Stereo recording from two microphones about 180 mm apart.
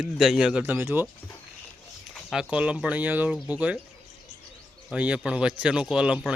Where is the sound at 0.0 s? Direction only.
Centre (ahead or behind).